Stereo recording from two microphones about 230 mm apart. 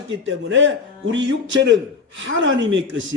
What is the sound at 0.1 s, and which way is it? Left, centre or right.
A man's voice, right.